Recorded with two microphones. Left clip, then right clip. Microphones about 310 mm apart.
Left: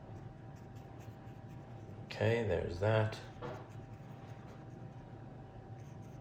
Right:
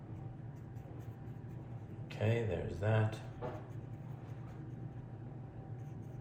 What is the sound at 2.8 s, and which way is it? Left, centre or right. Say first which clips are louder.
Speech: left 4 dB; left.